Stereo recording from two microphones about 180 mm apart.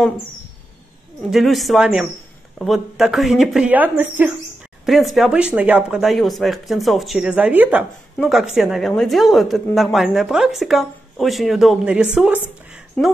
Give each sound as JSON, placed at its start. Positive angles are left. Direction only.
{"t": 1.3, "sound": "a woman's voice", "side_deg": 0}
{"t": 13.0, "sound": "a woman's voice", "side_deg": 5}